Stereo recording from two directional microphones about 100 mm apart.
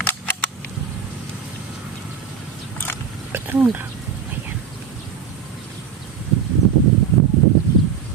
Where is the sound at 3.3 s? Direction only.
20° right (ahead or behind).